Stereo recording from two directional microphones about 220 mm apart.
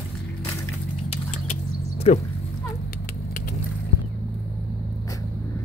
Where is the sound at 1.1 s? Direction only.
30° left (ahead or behind).